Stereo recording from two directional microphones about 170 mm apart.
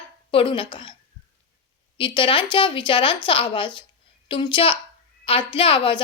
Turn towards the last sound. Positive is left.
turn(degrees=30)  # may be behind; listen again after turning